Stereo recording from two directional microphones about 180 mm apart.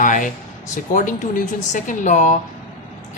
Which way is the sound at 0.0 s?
45° left (ahead or behind).